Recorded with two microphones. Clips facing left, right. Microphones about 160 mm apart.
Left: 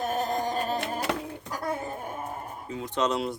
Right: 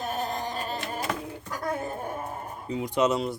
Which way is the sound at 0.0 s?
45° left (ahead or behind).